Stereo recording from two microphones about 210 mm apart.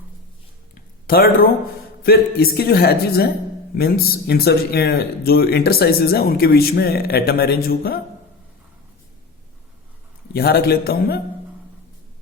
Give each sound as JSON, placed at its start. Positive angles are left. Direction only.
{"t": 0.7, "sound": "a sound", "side_deg": 45}
{"t": 2.0, "sound": "speech", "side_deg": 45}
{"t": 10.3, "sound": "speech", "side_deg": 50}